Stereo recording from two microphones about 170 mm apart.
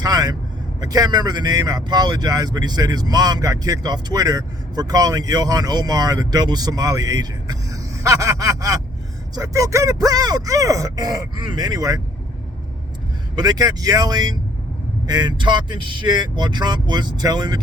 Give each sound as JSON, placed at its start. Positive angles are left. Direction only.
{"t": 0.0, "sound": "vehicle", "side_deg": -20}
{"t": 0.8, "sound": "speech", "side_deg": -20}
{"t": 13.3, "sound": "speech", "side_deg": -25}